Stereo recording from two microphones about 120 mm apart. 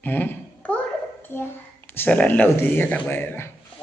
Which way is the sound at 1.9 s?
15° left (ahead or behind).